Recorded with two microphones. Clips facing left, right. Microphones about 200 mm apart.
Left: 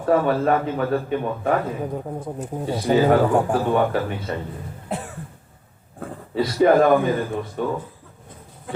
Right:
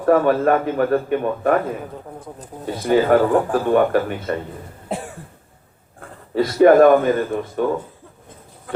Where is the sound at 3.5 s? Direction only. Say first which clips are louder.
Right 3 dB; 55° right (ahead or behind).